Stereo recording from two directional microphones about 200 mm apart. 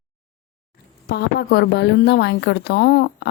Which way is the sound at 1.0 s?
55° left (ahead or behind).